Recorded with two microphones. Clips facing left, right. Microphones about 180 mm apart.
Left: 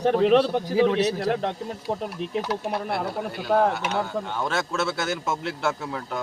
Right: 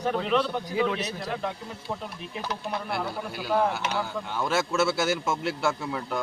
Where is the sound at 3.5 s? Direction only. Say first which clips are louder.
Left 4 dB; 40° left (ahead or behind).